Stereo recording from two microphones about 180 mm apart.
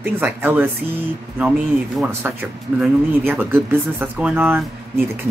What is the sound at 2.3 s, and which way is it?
Speech, 10° right (ahead or behind).